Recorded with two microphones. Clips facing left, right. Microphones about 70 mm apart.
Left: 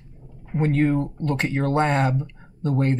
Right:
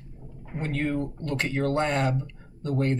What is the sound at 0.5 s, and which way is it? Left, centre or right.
Speech, left.